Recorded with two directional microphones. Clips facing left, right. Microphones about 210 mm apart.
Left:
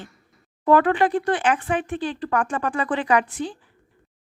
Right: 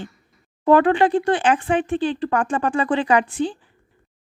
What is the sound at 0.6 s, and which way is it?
Speech, 25° right (ahead or behind).